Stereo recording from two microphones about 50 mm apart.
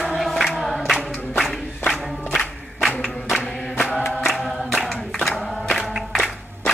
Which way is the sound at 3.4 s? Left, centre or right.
Centre.